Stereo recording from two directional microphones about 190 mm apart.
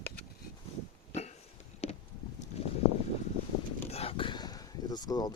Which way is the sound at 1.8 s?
35° left (ahead or behind).